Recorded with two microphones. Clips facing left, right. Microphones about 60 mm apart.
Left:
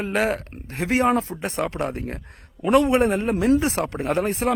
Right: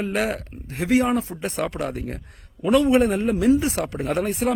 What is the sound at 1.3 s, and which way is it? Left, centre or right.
Speech, left.